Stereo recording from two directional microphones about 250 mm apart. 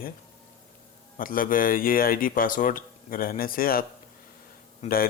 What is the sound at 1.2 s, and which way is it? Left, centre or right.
Speech, left.